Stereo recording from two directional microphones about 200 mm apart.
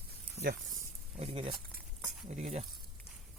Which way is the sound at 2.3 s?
35° right (ahead or behind).